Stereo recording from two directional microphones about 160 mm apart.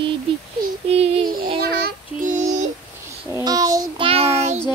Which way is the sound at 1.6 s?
70° right (ahead or behind).